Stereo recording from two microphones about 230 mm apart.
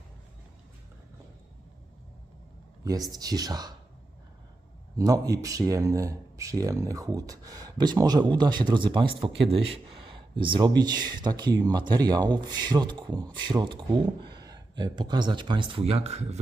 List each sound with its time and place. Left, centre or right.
3.1 s speech: centre
4.9 s speech: centre